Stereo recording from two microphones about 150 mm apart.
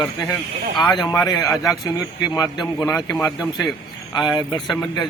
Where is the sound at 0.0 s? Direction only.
25° left (ahead or behind).